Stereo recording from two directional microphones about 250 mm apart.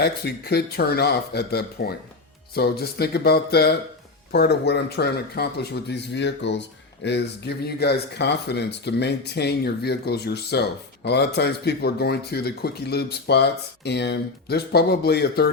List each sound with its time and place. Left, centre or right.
0.0 s a man's voice: left